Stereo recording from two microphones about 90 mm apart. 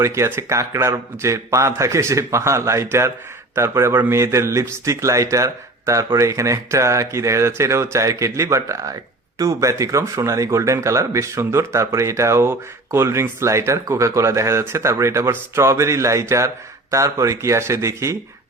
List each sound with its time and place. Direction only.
0.0 s speech: 30° right (ahead or behind)